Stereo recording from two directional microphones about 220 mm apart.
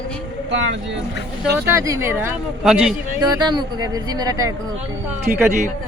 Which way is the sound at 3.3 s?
15° right (ahead or behind).